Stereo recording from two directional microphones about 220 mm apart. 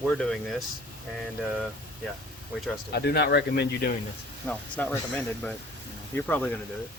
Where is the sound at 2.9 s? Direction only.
45° left (ahead or behind).